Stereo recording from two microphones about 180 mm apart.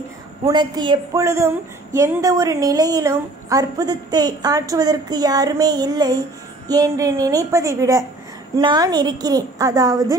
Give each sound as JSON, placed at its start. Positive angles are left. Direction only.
{"t": 0.5, "sound": "a woman's voice", "side_deg": -25}